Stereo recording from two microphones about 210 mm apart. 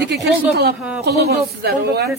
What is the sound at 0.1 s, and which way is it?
Speech, 50° right (ahead or behind).